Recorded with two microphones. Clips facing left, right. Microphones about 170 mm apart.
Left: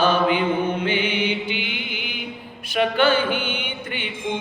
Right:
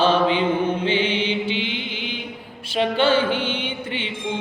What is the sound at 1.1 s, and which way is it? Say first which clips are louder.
Mantra: even; 10° left (ahead or behind).